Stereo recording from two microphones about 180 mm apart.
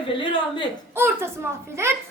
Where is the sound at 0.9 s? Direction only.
15° right (ahead or behind).